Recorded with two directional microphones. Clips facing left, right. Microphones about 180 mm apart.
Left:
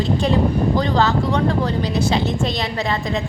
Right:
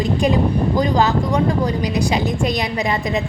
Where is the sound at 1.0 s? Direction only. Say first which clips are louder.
Right 1 dB; 15° right (ahead or behind).